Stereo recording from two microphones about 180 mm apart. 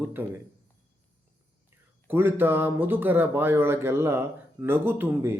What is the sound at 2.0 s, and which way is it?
Speech, 10° right (ahead or behind).